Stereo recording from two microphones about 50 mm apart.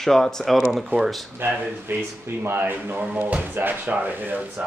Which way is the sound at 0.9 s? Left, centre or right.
Right.